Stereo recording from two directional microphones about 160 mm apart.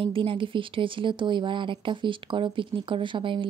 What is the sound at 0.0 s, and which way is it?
Speech, 30° right (ahead or behind).